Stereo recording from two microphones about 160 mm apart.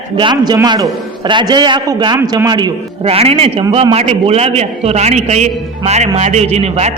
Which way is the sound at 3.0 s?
40° right (ahead or behind).